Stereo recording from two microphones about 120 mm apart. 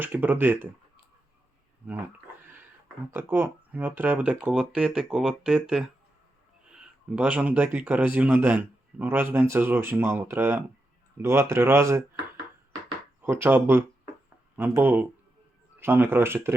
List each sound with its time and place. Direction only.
0.0 s speech: 15° right (ahead or behind)
3.1 s speech: 20° right (ahead or behind)
13.2 s speech: 15° right (ahead or behind)